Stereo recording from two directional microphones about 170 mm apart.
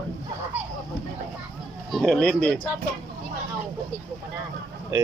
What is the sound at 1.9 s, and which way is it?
Speech, centre (ahead or behind).